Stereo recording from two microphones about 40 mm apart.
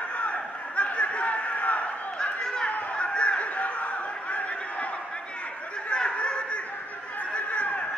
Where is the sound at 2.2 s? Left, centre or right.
Centre.